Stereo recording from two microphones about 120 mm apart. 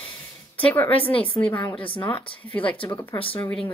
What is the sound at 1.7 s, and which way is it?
Speech, 45° left (ahead or behind).